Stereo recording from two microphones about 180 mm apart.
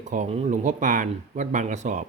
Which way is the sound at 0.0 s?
45° right (ahead or behind).